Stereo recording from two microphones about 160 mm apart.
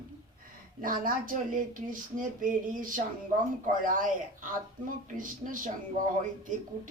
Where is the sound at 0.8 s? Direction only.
60° right (ahead or behind).